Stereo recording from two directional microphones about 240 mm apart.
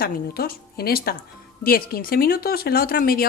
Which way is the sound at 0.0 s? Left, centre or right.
Left.